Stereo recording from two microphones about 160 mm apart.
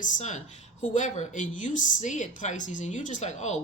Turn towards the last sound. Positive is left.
turn(degrees=45)  # may be behind; listen again after turning